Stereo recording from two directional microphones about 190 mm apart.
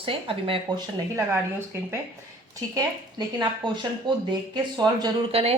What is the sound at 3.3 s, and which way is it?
Speech, 25° right (ahead or behind).